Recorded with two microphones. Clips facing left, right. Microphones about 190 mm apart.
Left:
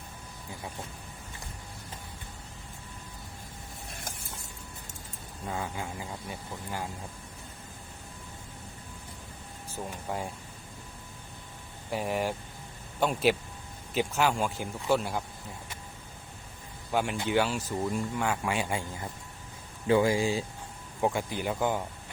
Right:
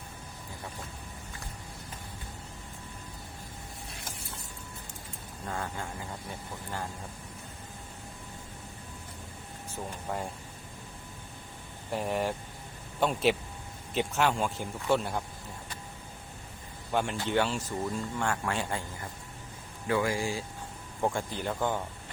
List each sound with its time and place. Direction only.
5.5 s speech: 5° left (ahead or behind)
10.1 s speech: centre (ahead or behind)
11.9 s speech: 5° left (ahead or behind)
16.9 s speech: 5° left (ahead or behind)
19.9 s speech: 20° left (ahead or behind)
21.0 s speech: 10° left (ahead or behind)